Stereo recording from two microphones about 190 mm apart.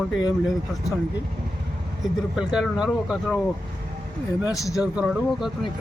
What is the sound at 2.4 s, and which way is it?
Speech, 5° right (ahead or behind).